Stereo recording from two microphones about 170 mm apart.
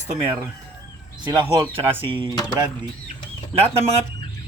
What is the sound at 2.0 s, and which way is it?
Speech, 30° right (ahead or behind).